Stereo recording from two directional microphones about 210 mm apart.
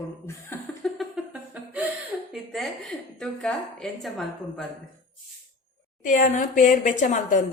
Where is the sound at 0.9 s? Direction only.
5° right (ahead or behind).